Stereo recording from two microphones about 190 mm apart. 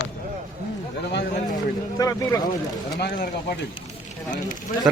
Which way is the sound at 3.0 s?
55° left (ahead or behind).